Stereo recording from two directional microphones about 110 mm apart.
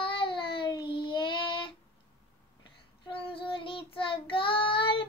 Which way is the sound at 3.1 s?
55° left (ahead or behind).